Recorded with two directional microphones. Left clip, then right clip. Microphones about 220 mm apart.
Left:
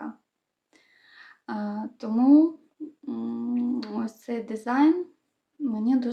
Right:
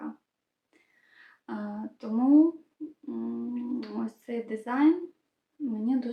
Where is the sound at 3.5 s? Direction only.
40° left (ahead or behind).